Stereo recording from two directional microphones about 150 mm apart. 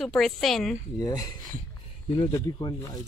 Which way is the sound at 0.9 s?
25° left (ahead or behind).